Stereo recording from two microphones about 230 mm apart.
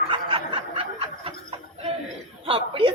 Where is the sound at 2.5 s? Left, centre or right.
Right.